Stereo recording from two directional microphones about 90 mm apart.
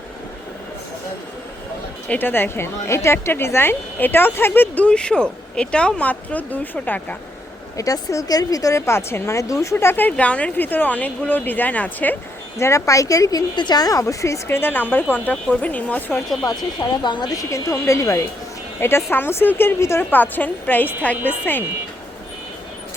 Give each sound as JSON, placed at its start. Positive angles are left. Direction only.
{"t": 2.0, "sound": "a woman's voice", "side_deg": 20}
{"t": 7.8, "sound": "speech", "side_deg": 40}
{"t": 9.7, "sound": "a woman's voice", "side_deg": 20}
{"t": 12.5, "sound": "speech", "side_deg": 35}
{"t": 14.0, "sound": "speech", "side_deg": 35}
{"t": 14.4, "sound": "a woman's voice", "side_deg": 25}
{"t": 16.5, "sound": "a woman's voice", "side_deg": 50}